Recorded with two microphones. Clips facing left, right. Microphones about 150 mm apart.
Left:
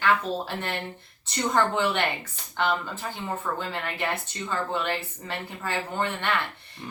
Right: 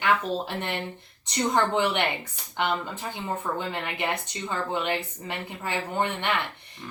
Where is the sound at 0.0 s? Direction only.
15° right (ahead or behind).